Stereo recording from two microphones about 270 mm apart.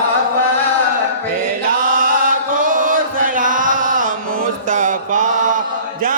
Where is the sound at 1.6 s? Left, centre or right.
Right.